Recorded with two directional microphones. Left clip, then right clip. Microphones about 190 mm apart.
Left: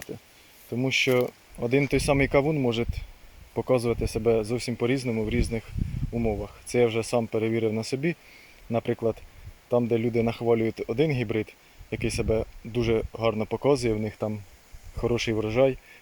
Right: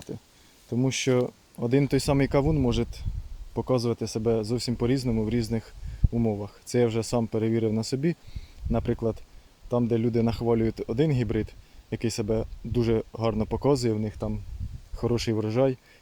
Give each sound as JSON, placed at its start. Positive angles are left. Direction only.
{"t": 0.7, "sound": "speech", "side_deg": -20}
{"t": 13.9, "sound": "speech", "side_deg": -5}